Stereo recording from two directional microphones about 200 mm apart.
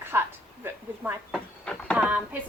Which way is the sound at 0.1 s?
10° right (ahead or behind).